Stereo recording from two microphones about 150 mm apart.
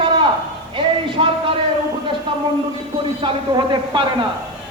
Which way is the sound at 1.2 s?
40° right (ahead or behind).